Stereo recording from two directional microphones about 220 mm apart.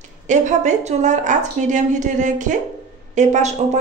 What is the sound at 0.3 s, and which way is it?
A woman's voice, 35° right (ahead or behind).